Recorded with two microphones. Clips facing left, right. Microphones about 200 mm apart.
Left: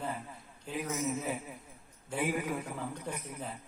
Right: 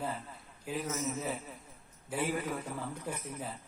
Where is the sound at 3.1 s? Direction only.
5° right (ahead or behind).